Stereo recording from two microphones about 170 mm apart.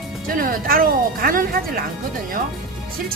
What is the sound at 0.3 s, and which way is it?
Speech, 55° right (ahead or behind).